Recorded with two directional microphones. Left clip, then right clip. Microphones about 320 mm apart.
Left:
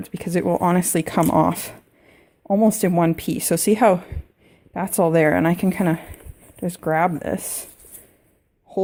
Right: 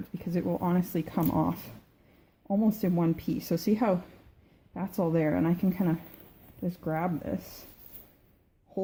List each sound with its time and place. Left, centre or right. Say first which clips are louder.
0.1 s speech: left 11 dB; left